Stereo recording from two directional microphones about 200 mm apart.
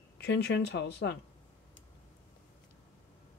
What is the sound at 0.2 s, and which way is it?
Speech, 55° left (ahead or behind).